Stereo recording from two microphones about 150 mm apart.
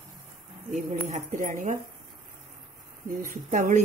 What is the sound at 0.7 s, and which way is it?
A woman's voice, 55° right (ahead or behind).